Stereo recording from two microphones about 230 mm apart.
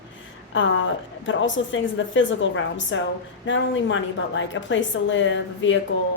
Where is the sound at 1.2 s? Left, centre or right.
Left.